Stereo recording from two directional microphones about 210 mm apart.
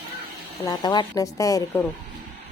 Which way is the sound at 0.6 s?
20° left (ahead or behind).